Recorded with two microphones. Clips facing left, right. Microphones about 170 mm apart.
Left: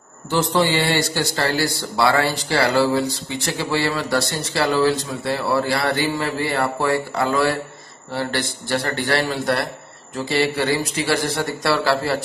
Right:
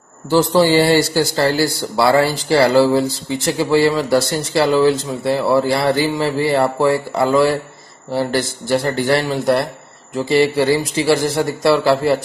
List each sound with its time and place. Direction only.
0.3 s a man's voice: 35° right (ahead or behind)